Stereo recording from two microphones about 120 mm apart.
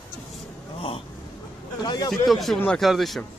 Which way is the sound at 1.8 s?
40° left (ahead or behind).